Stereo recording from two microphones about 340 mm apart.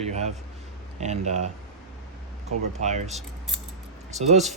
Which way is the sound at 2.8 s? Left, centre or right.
Centre.